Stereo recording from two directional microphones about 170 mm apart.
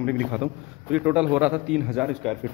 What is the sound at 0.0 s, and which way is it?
Speech, 10° left (ahead or behind).